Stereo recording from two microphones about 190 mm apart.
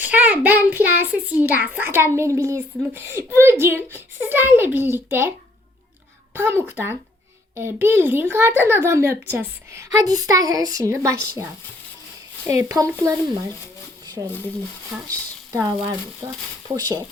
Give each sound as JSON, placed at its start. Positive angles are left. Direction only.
{"t": 0.0, "sound": "a child's voice", "side_deg": -10}
{"t": 6.3, "sound": "a child's voice", "side_deg": -10}
{"t": 12.5, "sound": "a child's voice", "side_deg": -15}
{"t": 14.2, "sound": "a child's voice", "side_deg": -10}
{"t": 16.6, "sound": "speech", "side_deg": -20}